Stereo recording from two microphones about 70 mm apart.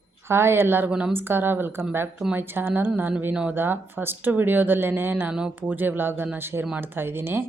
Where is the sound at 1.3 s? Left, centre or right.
Right.